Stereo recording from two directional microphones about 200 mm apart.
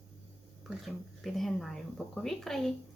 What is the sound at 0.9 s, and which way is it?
Speech, centre (ahead or behind).